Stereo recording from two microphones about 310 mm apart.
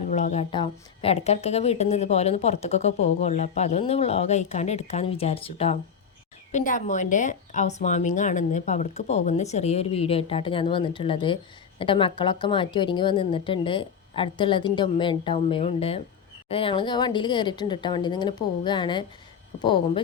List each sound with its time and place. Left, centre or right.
0.1 s a woman's voice: left